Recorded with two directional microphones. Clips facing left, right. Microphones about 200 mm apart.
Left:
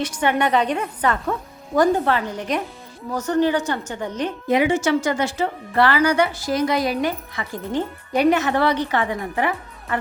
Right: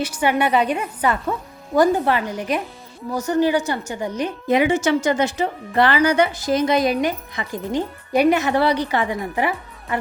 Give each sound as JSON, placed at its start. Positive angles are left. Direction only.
{"t": 0.0, "sound": "a woman's voice", "side_deg": -5}
{"t": 4.5, "sound": "a woman's voice", "side_deg": -20}